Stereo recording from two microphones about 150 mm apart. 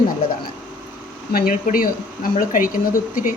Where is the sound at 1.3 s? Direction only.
70° left (ahead or behind).